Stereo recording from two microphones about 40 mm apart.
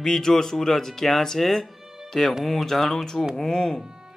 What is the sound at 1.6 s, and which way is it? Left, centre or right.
Music, centre.